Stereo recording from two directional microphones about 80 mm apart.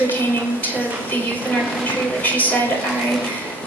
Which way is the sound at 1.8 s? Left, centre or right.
Left.